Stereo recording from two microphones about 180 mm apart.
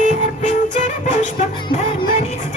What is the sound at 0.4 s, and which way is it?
Music, 45° left (ahead or behind).